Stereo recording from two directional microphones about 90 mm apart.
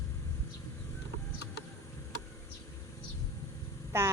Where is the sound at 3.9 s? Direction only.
30° right (ahead or behind).